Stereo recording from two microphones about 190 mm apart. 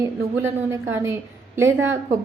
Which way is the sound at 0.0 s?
15° right (ahead or behind).